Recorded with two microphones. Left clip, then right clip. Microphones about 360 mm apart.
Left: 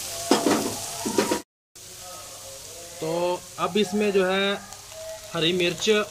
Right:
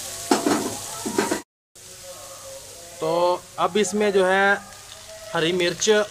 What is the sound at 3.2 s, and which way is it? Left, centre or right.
Speech, centre.